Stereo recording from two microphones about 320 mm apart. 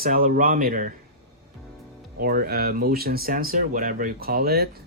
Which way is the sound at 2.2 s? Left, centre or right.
Right.